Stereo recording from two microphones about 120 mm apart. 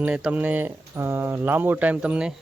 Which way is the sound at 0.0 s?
10° right (ahead or behind).